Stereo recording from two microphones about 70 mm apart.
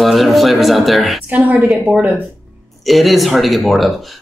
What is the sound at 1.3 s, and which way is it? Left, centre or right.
Speech, centre.